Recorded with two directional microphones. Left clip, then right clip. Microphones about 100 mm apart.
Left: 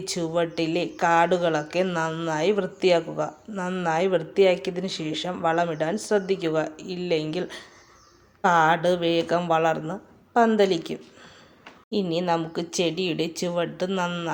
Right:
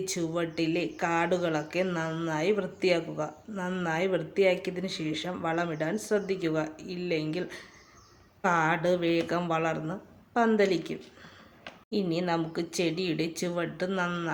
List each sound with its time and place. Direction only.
0.0 s a woman's voice: 10° left (ahead or behind)